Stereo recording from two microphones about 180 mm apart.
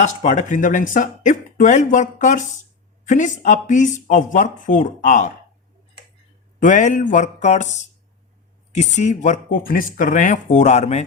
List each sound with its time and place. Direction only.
0.0 s speech: 40° left (ahead or behind)
6.6 s speech: 45° left (ahead or behind)